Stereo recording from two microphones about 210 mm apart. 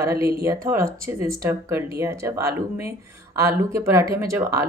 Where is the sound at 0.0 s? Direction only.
15° right (ahead or behind).